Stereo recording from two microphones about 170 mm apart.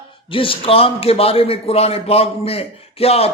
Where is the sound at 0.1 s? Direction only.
30° left (ahead or behind).